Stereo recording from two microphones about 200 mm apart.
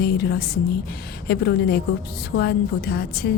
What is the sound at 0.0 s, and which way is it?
A woman's voice, 55° left (ahead or behind).